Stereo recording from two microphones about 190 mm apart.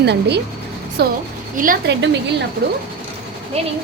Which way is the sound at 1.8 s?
70° right (ahead or behind).